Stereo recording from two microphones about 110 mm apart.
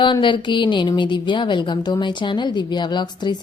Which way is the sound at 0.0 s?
45° left (ahead or behind).